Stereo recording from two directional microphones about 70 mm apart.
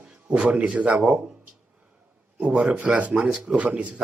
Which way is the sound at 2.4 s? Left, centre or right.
Centre.